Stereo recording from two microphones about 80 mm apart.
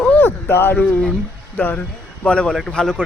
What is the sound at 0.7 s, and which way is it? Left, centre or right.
A man's voice, centre.